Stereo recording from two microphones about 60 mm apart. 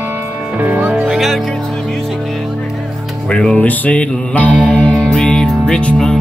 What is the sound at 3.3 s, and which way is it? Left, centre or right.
Music, left.